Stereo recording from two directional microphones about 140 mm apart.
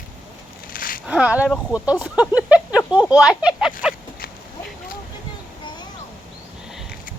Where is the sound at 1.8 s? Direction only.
10° right (ahead or behind).